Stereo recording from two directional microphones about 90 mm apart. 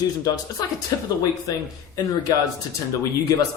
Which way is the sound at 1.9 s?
40° left (ahead or behind).